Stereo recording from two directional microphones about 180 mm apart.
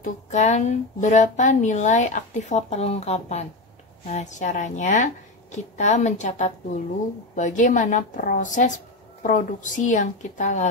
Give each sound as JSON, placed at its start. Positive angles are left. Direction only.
{"t": 0.0, "sound": "a woman's voice", "side_deg": 40}